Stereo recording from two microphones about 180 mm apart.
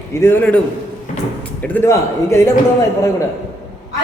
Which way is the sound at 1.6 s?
15° left (ahead or behind).